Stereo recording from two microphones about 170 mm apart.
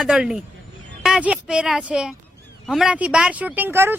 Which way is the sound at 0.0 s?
5° right (ahead or behind).